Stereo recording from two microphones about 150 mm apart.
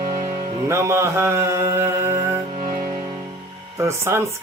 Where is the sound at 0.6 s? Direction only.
20° right (ahead or behind).